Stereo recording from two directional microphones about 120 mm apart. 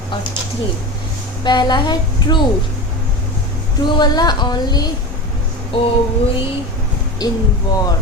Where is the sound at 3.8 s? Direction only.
40° left (ahead or behind).